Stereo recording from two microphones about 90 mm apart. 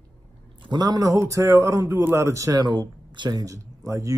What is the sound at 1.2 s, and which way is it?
A man's voice, 30° right (ahead or behind).